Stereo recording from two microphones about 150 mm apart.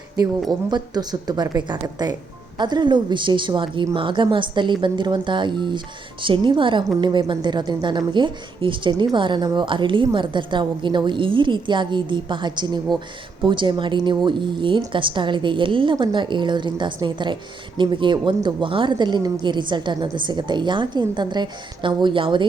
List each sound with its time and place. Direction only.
0.7 s a woman's voice: 25° right (ahead or behind)